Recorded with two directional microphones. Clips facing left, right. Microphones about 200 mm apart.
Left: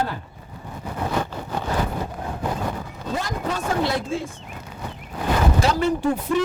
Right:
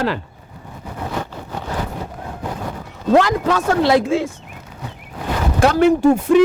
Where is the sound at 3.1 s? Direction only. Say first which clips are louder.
Right 12 dB; 85° right.